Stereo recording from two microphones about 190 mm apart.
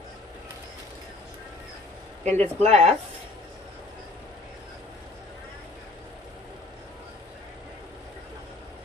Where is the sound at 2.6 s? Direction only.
35° right (ahead or behind).